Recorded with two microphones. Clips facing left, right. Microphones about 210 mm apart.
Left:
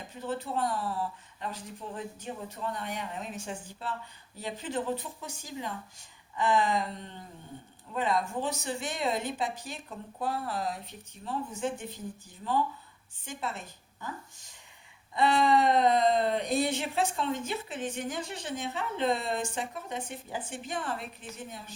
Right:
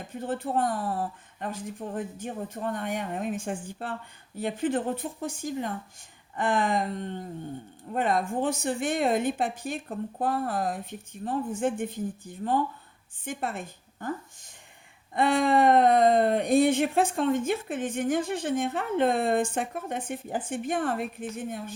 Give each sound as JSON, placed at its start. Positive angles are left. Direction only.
{"t": 0.1, "sound": "speech", "side_deg": -50}